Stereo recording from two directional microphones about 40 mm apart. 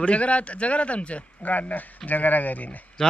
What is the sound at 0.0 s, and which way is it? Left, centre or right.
A man's voice, left.